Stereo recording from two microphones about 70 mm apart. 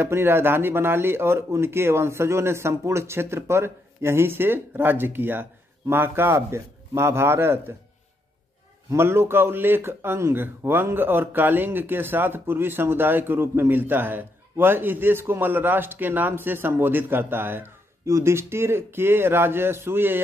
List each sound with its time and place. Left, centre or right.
0.0 s speech: right
8.9 s speech: right